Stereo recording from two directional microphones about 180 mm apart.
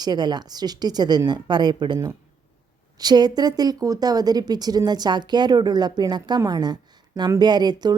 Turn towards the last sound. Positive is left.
turn(degrees=-25)  # may be behind; listen again after turning